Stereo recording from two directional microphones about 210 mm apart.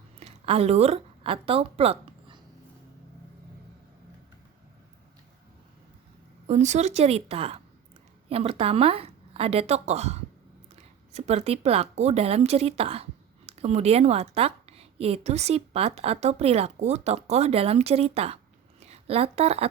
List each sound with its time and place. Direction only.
0.2 s speech: 30° right (ahead or behind)
6.5 s a woman's voice: 35° right (ahead or behind)